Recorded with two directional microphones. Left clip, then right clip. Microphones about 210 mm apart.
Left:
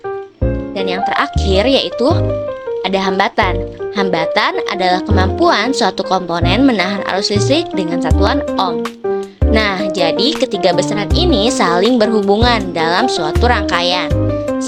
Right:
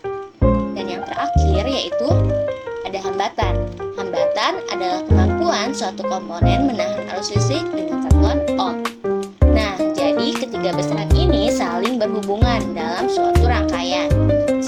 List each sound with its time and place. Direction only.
1.1 s speech: 40° left (ahead or behind)
2.9 s speech: 45° left (ahead or behind)